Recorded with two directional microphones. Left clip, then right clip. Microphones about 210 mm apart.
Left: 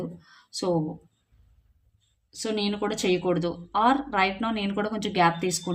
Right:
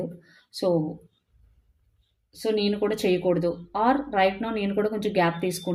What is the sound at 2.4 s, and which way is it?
Speech, 25° left (ahead or behind).